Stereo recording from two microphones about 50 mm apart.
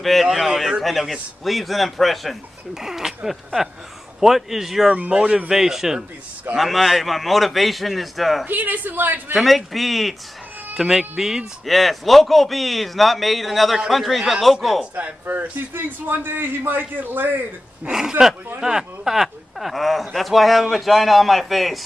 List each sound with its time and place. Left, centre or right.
0.0 s a man's voice: centre
2.7 s a man's voice: centre
4.2 s a man's voice: centre
4.9 s a man's voice: centre
8.5 s a man's voice: right
9.4 s a man's voice: centre
15.7 s a man's voice: right
18.2 s a man's voice: right
18.6 s a man's voice: centre